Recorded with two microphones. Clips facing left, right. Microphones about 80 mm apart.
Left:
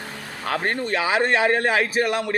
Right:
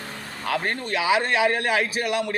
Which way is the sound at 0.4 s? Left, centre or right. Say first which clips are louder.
Left 2 dB; left.